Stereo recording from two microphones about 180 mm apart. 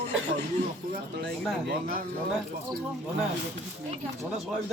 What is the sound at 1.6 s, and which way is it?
Speech, 50° right (ahead or behind).